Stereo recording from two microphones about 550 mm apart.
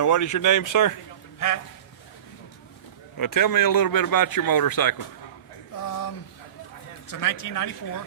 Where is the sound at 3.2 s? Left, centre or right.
Left.